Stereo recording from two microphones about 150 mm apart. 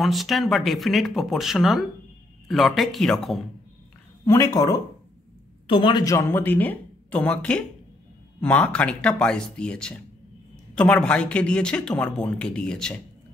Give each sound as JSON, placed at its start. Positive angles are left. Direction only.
{"t": 0.0, "sound": "speech", "side_deg": 0}
{"t": 4.3, "sound": "speech", "side_deg": 20}
{"t": 5.7, "sound": "speech", "side_deg": 30}